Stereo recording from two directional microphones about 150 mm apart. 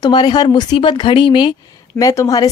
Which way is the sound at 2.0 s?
20° left (ahead or behind).